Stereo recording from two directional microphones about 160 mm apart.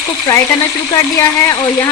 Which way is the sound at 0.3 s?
20° left (ahead or behind).